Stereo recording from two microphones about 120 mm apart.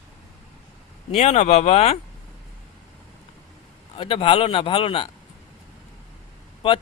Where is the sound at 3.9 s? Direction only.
50° left (ahead or behind).